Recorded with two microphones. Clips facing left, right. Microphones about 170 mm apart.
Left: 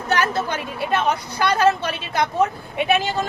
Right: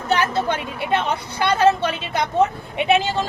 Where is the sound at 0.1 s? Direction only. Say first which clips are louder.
Right 1 dB; 25° right (ahead or behind).